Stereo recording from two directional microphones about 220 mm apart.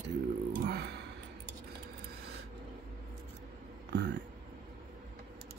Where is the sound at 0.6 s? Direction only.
45° right (ahead or behind).